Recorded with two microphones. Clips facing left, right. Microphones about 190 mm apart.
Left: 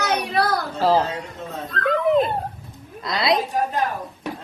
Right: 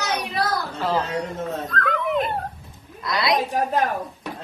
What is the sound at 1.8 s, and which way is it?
Dog, 30° left (ahead or behind).